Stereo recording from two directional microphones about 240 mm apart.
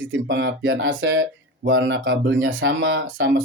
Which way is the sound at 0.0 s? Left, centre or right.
Right.